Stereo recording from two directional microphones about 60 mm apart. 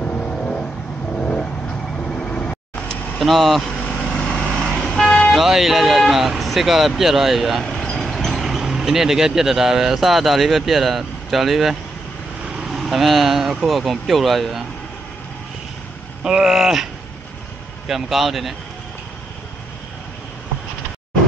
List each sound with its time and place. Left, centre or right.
0.0 s vehicle: centre
3.2 s speech: centre
3.7 s vehicle: centre
5.3 s speech: centre
7.6 s speech: centre
16.3 s speech: centre
17.8 s speech: centre